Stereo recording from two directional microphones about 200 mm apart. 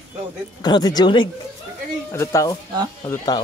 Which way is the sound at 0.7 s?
20° left (ahead or behind).